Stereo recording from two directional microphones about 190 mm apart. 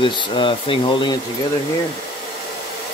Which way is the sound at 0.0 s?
25° left (ahead or behind).